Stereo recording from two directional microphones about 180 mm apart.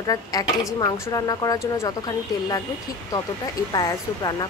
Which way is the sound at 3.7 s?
25° left (ahead or behind).